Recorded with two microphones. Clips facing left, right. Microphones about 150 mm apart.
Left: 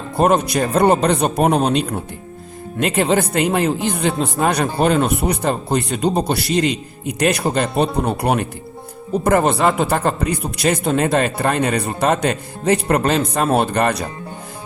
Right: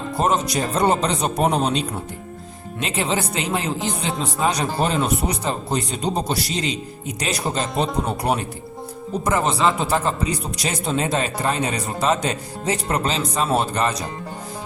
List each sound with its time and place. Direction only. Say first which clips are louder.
0.2 s speech: left 6 dB; 60° left (ahead or behind)